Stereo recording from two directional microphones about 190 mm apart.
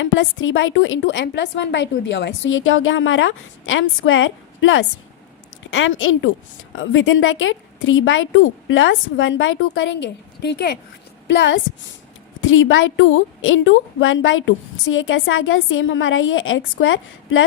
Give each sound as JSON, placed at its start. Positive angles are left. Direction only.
{"t": 0.0, "sound": "a woman's voice", "side_deg": 85}
{"t": 11.3, "sound": "a woman's voice", "side_deg": 70}
{"t": 12.4, "sound": "a woman's voice", "side_deg": 90}